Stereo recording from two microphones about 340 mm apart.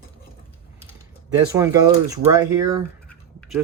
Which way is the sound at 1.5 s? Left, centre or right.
Centre.